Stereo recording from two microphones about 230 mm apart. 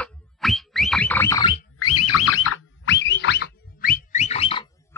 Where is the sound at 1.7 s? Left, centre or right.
Left.